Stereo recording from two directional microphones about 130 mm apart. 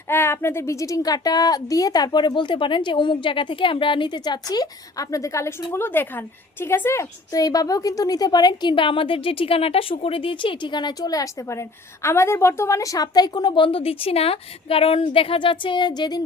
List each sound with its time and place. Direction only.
0.1 s a woman's voice: 20° left (ahead or behind)